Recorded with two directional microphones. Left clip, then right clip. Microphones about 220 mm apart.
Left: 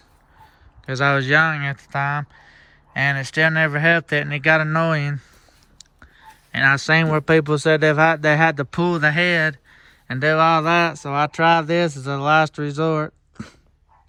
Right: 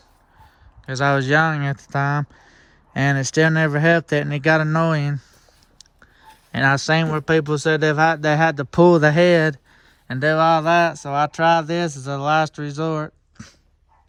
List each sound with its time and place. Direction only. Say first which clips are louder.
0.9 s speech: left 1 dB; 15° right (ahead or behind)
6.5 s speech: left 2 dB; 25° right (ahead or behind)
13.3 s dog: left 5 dB; centre (ahead or behind)